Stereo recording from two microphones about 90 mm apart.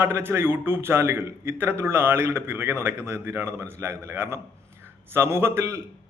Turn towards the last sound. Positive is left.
turn(degrees=-30)  # may be behind; listen again after turning